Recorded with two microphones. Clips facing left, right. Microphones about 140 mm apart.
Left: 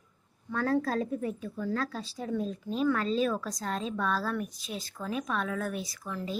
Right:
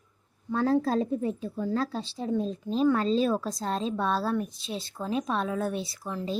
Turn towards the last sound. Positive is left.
turn(degrees=-25)  # may be behind; listen again after turning